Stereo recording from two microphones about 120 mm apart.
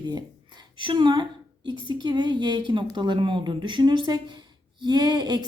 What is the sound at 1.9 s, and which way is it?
A woman's voice, 40° right (ahead or behind).